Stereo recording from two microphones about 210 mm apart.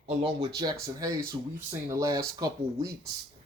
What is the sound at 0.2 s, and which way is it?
Speech, 20° right (ahead or behind).